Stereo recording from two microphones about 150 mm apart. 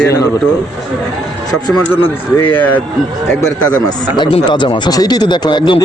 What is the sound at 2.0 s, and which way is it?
Speech, 10° left (ahead or behind).